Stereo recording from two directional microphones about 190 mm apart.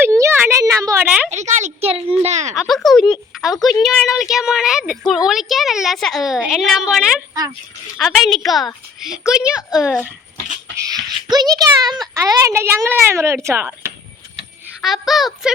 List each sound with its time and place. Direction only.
0.0 s a sound: 10° right (ahead or behind)
1.3 s a sound: 40° right (ahead or behind)
2.2 s speech: 35° right (ahead or behind)
2.6 s speech: centre (ahead or behind)
11.3 s a child's voice: 20° right (ahead or behind)
14.8 s speech: centre (ahead or behind)